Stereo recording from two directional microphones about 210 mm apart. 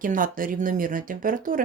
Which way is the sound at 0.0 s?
40° right (ahead or behind).